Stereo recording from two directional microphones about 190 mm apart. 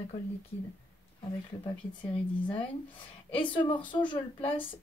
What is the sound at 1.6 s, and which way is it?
A woman's voice, 25° left (ahead or behind).